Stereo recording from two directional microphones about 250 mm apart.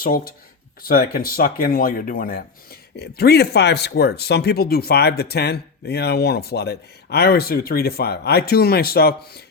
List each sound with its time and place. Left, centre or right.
0.0 s speech: left